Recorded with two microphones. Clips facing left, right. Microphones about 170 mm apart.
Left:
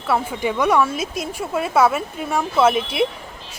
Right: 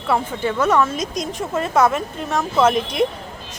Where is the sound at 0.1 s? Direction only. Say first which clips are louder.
Even; 10° left (ahead or behind).